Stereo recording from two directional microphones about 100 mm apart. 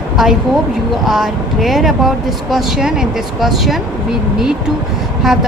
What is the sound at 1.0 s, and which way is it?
Speech, centre (ahead or behind).